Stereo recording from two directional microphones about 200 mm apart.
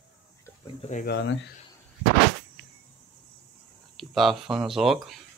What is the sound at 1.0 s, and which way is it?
Speech, 60° left (ahead or behind).